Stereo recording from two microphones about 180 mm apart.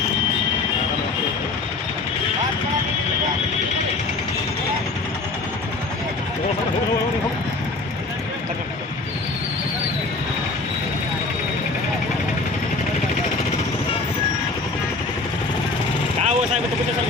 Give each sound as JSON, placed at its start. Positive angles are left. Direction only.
{"t": 16.2, "sound": "vehicle", "side_deg": -40}